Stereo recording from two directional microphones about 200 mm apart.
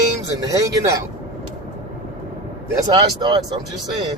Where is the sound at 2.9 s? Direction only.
20° right (ahead or behind).